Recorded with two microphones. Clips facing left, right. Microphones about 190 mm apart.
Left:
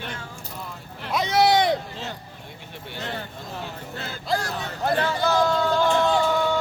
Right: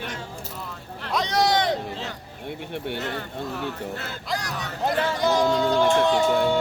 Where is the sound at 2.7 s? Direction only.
60° right (ahead or behind).